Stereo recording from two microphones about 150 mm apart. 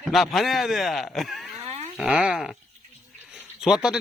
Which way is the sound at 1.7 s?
50° right (ahead or behind).